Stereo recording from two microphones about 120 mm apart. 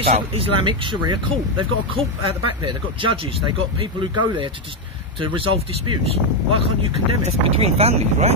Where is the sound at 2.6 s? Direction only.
45° right (ahead or behind).